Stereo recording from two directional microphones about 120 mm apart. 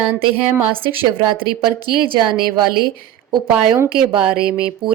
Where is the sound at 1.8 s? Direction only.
45° right (ahead or behind).